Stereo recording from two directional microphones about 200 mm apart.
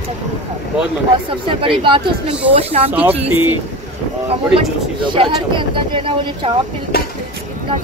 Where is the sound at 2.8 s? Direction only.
10° right (ahead or behind).